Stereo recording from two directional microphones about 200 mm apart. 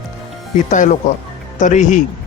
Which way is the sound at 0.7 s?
40° left (ahead or behind).